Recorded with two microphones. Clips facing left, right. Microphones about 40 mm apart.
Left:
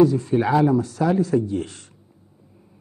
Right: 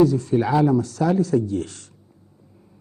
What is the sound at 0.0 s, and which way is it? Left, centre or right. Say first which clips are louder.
A man's voice: left 1 dB; left.